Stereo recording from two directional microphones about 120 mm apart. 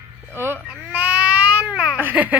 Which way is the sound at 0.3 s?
20° right (ahead or behind).